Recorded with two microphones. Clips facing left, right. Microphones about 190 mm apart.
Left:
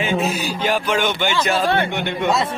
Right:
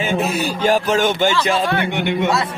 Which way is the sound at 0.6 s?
45° right (ahead or behind).